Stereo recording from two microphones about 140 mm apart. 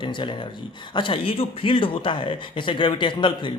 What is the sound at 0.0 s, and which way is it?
A man's voice, 35° left (ahead or behind).